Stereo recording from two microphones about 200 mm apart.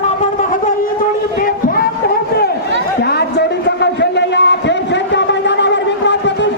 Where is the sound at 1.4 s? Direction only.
45° left (ahead or behind).